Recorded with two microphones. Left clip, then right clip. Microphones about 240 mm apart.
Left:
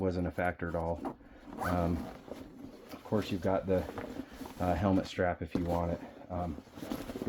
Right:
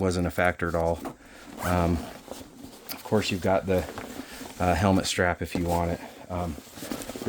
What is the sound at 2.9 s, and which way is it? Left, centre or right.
Speech, right.